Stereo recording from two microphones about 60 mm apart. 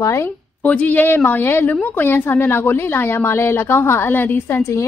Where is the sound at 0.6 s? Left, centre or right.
Left.